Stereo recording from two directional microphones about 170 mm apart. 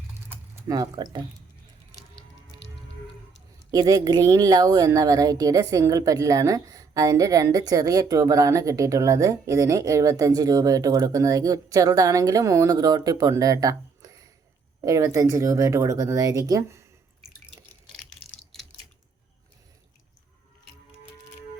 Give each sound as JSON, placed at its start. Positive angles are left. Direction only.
{"t": 0.7, "sound": "a woman's voice", "side_deg": -25}
{"t": 3.7, "sound": "a woman's voice", "side_deg": -20}